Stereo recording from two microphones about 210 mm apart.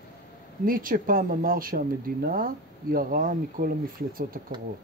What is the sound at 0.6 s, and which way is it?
Speech, 40° right (ahead or behind).